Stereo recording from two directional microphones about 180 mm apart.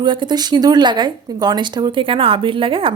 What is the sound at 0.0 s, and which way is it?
A woman's voice, 25° right (ahead or behind).